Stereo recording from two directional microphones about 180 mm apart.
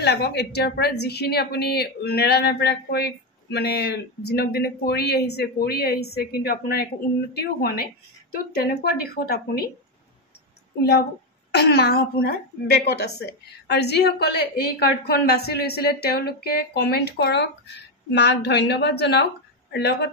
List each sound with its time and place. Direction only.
0.0 s a woman's voice: 65° left (ahead or behind)
10.8 s a woman's voice: 65° left (ahead or behind)